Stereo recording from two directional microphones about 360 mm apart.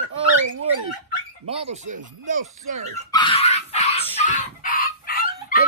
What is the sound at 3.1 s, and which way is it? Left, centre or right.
Chicken, centre.